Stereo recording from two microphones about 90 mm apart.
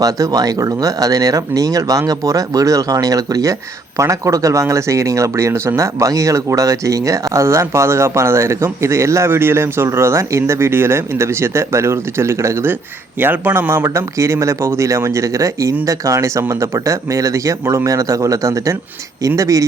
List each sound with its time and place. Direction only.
0.0 s speech: 40° right (ahead or behind)
13.1 s speech: 20° right (ahead or behind); by 19.6 s 35° right (ahead or behind)